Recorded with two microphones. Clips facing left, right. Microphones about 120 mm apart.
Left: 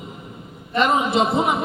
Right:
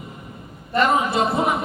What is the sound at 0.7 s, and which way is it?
Speech, 20° left (ahead or behind).